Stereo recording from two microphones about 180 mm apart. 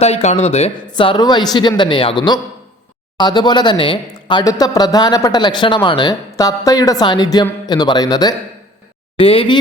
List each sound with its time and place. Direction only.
0.0 s speech: 40° left (ahead or behind)